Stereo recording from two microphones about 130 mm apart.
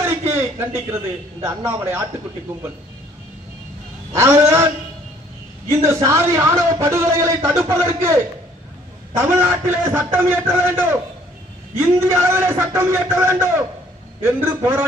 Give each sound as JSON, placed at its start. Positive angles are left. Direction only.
{"t": 0.0, "sound": "a sound", "side_deg": -20}
{"t": 1.4, "sound": "a man's voice", "side_deg": -20}
{"t": 4.1, "sound": "a man's voice", "side_deg": -20}